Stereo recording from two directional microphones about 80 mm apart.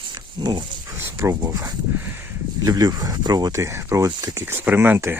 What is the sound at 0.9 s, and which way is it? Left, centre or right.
Speech, right.